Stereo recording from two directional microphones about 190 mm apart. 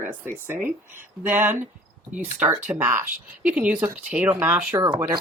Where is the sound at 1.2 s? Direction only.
10° right (ahead or behind).